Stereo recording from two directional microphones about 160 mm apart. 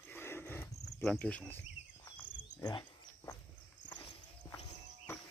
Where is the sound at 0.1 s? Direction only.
15° left (ahead or behind).